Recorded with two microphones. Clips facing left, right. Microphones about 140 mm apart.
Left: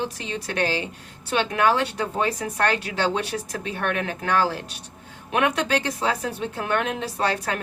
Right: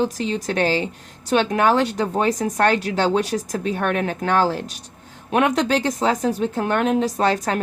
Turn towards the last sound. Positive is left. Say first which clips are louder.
# right 5 dB
turn(degrees=-40)  # may be behind; listen again after turning